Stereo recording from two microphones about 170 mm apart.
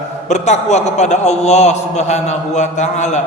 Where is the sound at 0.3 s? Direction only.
45° left (ahead or behind).